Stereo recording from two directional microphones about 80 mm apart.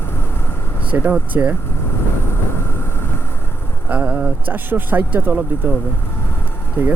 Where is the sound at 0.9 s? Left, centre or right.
Centre.